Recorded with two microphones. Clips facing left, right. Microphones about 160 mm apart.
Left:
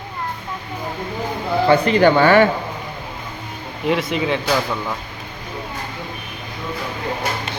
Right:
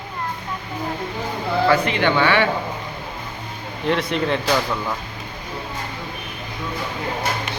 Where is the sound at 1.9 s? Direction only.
40° left (ahead or behind).